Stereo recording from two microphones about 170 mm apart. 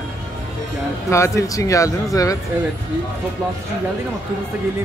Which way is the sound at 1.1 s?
15° left (ahead or behind).